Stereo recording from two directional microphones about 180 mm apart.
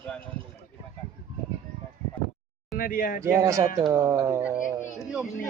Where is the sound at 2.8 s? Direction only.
50° left (ahead or behind).